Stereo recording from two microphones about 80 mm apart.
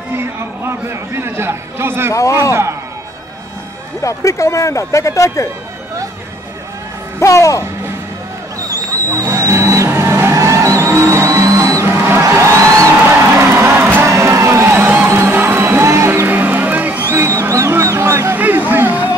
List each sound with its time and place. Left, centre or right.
0.7 s a man's voice: right
4.0 s speech: left
7.2 s music: left
8.5 s vehicle: right
13.4 s music: right
14.0 s crowd: right
15.0 s music: right
16.3 s music: right
17.1 s music: right
18.3 s a sound: right